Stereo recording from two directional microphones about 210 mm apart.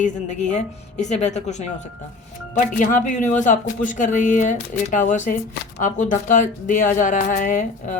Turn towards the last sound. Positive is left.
turn(degrees=35)  # may be behind; listen again after turning